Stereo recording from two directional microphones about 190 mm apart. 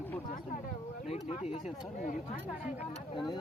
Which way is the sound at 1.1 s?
35° left (ahead or behind).